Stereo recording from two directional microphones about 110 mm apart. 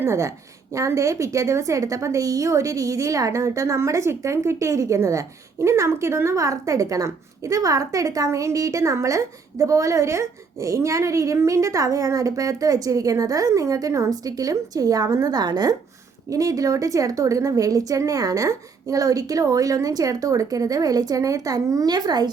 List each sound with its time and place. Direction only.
0.0 s a woman's voice: 25° right (ahead or behind)